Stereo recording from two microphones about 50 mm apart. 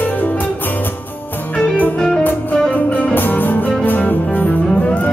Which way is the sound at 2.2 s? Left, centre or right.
Left.